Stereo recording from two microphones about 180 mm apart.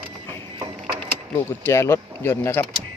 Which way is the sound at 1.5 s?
15° left (ahead or behind).